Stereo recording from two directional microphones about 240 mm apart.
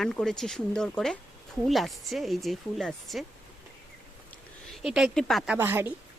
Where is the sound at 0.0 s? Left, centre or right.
Centre.